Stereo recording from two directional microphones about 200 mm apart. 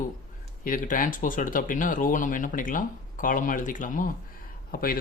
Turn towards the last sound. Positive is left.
turn(degrees=45)  # may be behind; listen again after turning